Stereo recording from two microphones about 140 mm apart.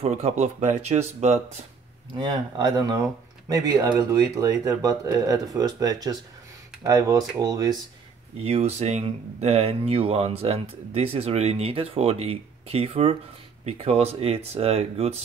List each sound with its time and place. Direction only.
0.0 s speech: 50° right (ahead or behind)
2.1 s speech: 30° right (ahead or behind)
8.5 s speech: 50° right (ahead or behind)